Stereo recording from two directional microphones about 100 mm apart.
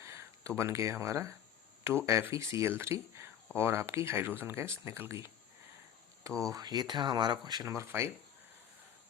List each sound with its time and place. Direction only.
0.0 s speech: 25° right (ahead or behind)